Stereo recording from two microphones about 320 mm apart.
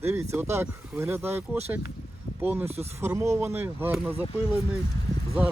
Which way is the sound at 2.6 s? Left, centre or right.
Centre.